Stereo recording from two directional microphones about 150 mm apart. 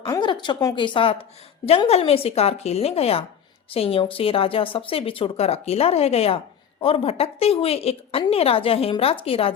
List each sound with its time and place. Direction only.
0.1 s a woman's voice: 30° left (ahead or behind)